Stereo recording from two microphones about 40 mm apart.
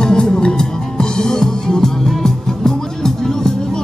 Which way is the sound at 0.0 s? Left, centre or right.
Centre.